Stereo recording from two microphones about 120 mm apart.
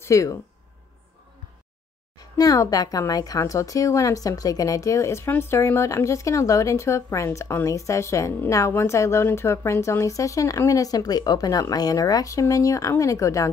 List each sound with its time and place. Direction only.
0.0 s speech: 25° left (ahead or behind)
2.1 s speech: 30° left (ahead or behind)